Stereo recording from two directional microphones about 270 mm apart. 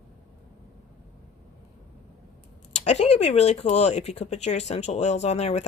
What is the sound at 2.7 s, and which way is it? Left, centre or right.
Speech, left.